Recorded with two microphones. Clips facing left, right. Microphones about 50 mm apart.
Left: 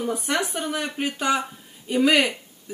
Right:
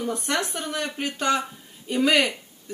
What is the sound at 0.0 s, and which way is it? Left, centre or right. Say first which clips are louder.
Speech: left 1 dB; centre.